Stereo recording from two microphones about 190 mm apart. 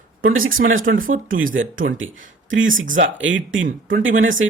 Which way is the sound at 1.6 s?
45° right (ahead or behind).